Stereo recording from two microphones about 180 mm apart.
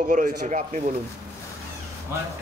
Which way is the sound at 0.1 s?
45° right (ahead or behind).